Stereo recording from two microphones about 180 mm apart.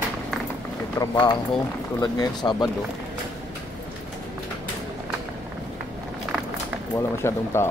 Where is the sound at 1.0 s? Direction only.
25° left (ahead or behind).